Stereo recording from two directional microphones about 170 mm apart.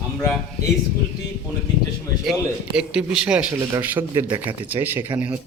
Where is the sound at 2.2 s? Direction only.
5° right (ahead or behind).